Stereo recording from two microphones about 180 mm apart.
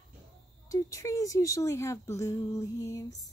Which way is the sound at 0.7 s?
20° left (ahead or behind).